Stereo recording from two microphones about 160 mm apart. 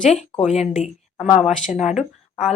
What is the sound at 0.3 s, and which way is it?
A woman's voice, 45° left (ahead or behind).